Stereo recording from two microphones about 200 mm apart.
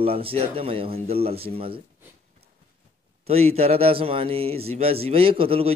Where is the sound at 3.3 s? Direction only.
30° right (ahead or behind).